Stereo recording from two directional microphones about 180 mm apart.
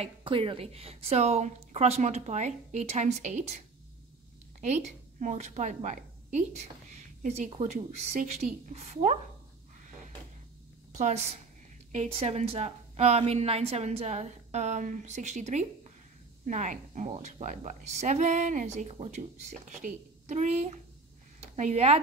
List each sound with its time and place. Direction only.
0.0 s a woman's voice: 30° right (ahead or behind)
10.9 s a woman's voice: 40° right (ahead or behind)
21.5 s a woman's voice: 40° right (ahead or behind)